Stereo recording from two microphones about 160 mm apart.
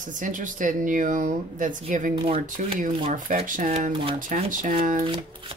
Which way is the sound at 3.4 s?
55° right (ahead or behind).